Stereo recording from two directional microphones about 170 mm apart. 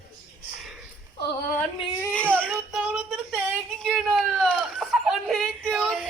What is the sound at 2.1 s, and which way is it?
Baby cry, 5° left (ahead or behind).